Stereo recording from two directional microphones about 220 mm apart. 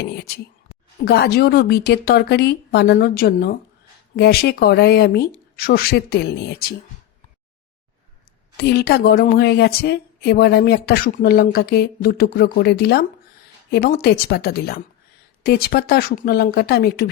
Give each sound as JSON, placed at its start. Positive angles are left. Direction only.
{"t": 0.0, "sound": "a woman's voice", "side_deg": 45}
{"t": 8.5, "sound": "a woman's voice", "side_deg": 45}